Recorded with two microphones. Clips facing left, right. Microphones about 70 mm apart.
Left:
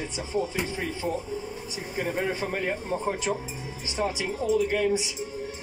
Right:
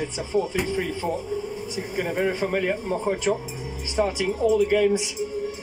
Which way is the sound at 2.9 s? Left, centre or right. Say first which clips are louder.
Right 4 dB; right.